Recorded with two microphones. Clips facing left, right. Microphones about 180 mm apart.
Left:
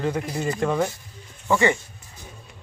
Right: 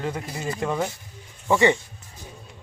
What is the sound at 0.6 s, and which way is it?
Speech, 15° right (ahead or behind).